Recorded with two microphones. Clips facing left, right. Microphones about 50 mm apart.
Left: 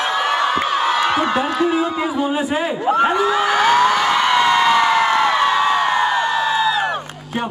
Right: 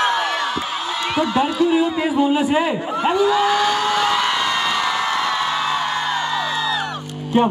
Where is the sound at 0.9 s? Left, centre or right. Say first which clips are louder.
Left 4 dB; left.